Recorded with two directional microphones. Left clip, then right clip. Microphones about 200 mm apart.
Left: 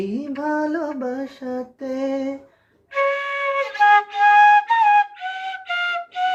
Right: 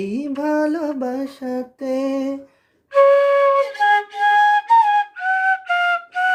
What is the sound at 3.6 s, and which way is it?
Flute, 15° left (ahead or behind).